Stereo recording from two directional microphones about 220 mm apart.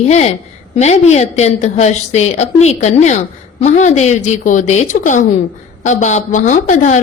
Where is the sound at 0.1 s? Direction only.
30° left (ahead or behind).